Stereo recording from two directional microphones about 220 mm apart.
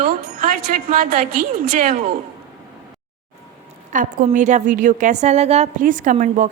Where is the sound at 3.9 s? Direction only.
35° right (ahead or behind).